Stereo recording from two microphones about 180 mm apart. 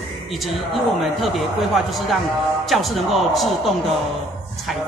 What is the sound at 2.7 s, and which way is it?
Speech, centre (ahead or behind).